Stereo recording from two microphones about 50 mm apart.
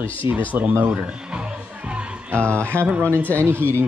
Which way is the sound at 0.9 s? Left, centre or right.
Right.